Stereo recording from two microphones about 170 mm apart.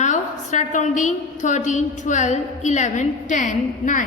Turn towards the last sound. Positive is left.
turn(degrees=50)  # may be behind; listen again after turning